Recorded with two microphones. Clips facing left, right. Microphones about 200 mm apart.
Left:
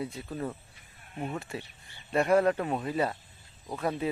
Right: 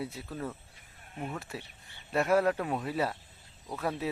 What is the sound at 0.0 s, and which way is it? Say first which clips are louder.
Speech: left 2 dB; 5° right (ahead or behind).